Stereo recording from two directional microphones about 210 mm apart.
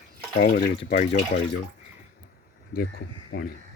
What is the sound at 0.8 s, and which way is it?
Speech, 35° left (ahead or behind).